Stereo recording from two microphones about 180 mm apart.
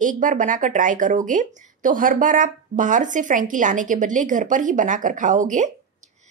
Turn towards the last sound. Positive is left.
turn(degrees=-45)  # may be behind; listen again after turning